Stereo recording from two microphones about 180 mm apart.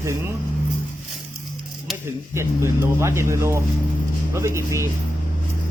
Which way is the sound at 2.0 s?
15° right (ahead or behind).